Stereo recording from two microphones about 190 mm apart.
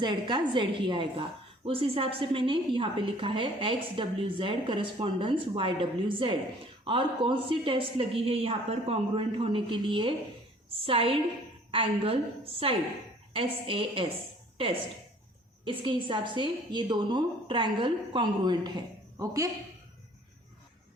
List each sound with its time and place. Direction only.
0.0 s a woman's voice: 25° right (ahead or behind)